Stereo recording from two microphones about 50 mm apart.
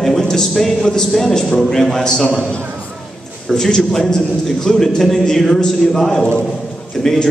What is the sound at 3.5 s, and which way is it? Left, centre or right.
A man's voice, centre.